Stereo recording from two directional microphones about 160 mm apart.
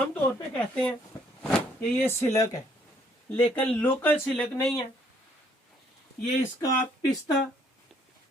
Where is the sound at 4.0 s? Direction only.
10° left (ahead or behind).